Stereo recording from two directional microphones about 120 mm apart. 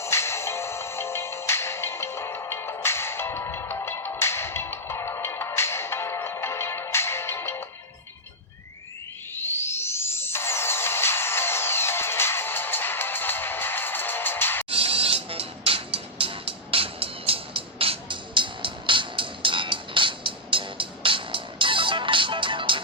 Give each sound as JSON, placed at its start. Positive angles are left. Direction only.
{"t": 0.0, "sound": "music", "side_deg": 20}
{"t": 9.3, "sound": "music", "side_deg": 20}
{"t": 14.7, "sound": "music", "side_deg": -50}